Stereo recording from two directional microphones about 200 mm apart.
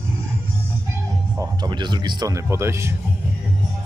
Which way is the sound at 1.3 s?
20° right (ahead or behind).